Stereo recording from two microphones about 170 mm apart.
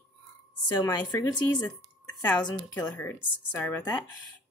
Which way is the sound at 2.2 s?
25° left (ahead or behind).